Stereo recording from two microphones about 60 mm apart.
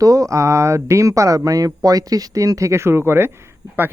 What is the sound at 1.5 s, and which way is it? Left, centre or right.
Speech, right.